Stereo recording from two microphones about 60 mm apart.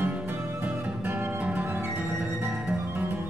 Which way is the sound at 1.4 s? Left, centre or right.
Right.